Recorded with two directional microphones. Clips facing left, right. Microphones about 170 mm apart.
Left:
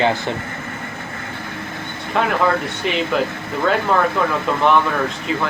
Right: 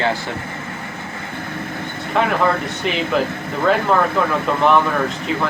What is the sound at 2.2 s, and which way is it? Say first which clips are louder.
Speech: even; centre (ahead or behind).